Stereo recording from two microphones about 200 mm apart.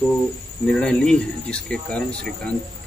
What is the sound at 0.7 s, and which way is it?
Speech, 5° left (ahead or behind).